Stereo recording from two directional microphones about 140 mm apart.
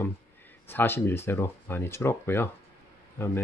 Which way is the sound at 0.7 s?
15° left (ahead or behind).